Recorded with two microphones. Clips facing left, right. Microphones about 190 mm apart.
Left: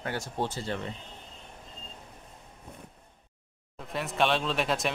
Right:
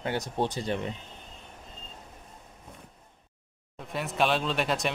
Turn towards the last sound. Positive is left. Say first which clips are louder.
# right 1 dB
turn(degrees=0)  # may be behind; listen again after turning